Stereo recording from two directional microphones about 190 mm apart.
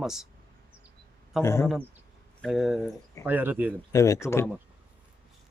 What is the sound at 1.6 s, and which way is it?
A man's voice, centre (ahead or behind).